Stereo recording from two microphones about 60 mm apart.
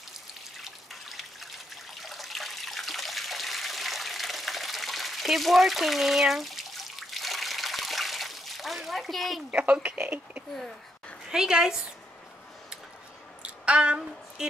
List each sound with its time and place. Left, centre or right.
0.6 s drip: centre
2.0 s water: centre
9.5 s speech: right
11.2 s a woman's voice: centre
13.4 s a sound: centre